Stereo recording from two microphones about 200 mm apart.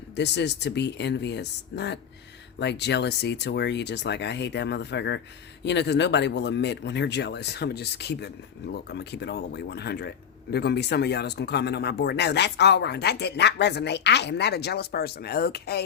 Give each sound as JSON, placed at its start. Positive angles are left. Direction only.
{"t": 0.2, "sound": "speech", "side_deg": 60}